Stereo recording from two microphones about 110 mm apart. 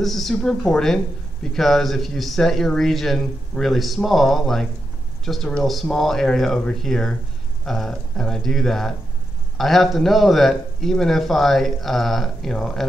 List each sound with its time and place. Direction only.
0.0 s a man's voice: centre (ahead or behind)